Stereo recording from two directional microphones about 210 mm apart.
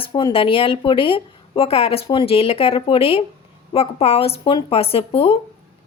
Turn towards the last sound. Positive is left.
turn(degrees=25)  # may be behind; listen again after turning